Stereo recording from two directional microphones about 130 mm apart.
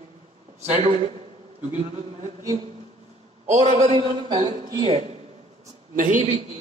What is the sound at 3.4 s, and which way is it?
A man's voice, 60° right (ahead or behind).